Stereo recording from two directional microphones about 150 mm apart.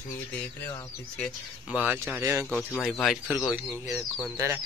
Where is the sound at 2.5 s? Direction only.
5° left (ahead or behind).